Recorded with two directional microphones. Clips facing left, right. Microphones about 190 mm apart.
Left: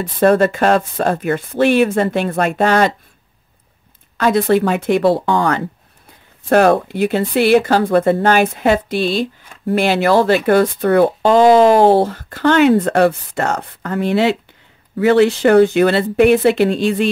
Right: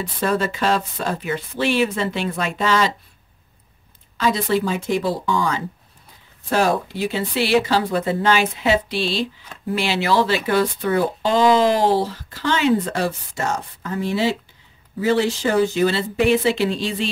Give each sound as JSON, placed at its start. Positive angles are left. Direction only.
{"t": 0.0, "sound": "speech", "side_deg": 55}
{"t": 4.2, "sound": "speech", "side_deg": 55}